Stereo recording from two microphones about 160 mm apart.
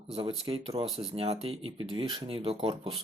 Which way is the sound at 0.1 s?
35° right (ahead or behind).